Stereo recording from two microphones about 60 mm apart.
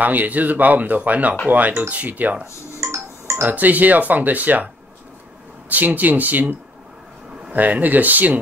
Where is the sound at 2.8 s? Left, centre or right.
Right.